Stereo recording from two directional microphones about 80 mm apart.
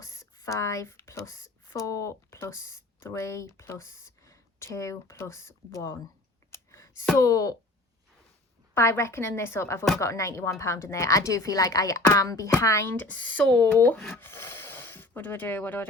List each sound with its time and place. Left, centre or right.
0.0 s speech: left
6.5 s clicking: left
7.2 s speech: left
8.7 s a woman's voice: left
13.1 s speech: centre